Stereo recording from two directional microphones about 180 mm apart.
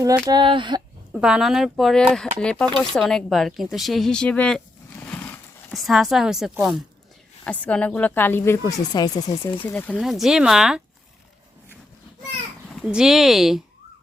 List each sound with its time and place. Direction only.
0.3 s speech: 25° right (ahead or behind)
1.1 s speech: 5° right (ahead or behind); by 9.7 s 30° left (ahead or behind)
9.7 s speech: 10° left (ahead or behind)
10.0 s speech: centre (ahead or behind)
12.6 s speech: centre (ahead or behind)